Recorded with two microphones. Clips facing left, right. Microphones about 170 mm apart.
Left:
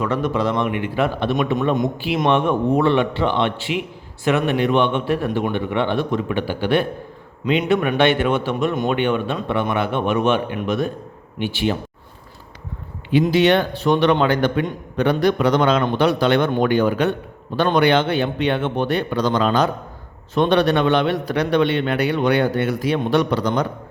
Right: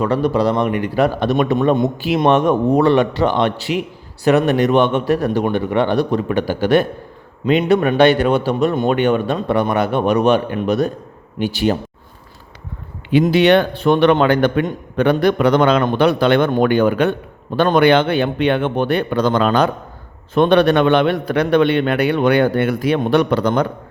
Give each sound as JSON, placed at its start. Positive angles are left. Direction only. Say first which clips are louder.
{"t": 0.0, "sound": "a man's voice", "louder": "right 4 dB", "side_deg": -35}
{"t": 13.2, "sound": "a man's voice", "louder": "right 4 dB", "side_deg": -65}